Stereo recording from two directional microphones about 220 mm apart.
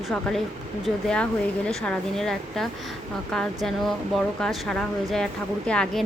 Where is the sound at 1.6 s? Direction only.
5° left (ahead or behind).